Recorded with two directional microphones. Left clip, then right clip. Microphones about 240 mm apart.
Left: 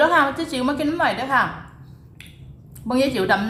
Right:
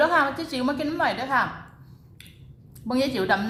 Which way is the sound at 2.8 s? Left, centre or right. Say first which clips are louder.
Left 4 dB; centre.